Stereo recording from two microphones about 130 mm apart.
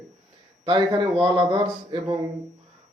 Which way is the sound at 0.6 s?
40° right (ahead or behind).